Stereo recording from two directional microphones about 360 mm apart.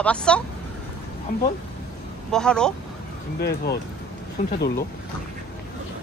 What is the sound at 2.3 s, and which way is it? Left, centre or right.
Speech, centre.